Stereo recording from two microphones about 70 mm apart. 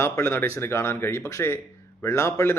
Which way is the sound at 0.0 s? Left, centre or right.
Left.